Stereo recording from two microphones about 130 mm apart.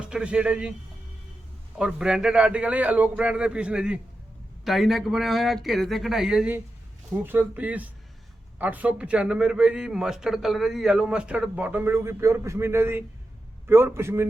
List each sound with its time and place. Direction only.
0.0 s a man's voice: 5° right (ahead or behind)
1.8 s a man's voice: 5° right (ahead or behind)